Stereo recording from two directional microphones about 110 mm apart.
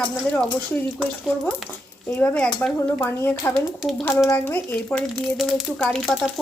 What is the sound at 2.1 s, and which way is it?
Speech, 15° left (ahead or behind).